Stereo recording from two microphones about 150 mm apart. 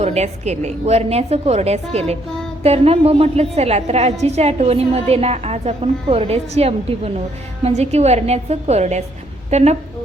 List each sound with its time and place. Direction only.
0.0 s a woman's voice: 45° right (ahead or behind)